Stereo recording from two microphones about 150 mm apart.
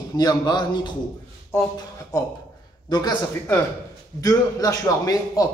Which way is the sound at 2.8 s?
30° left (ahead or behind).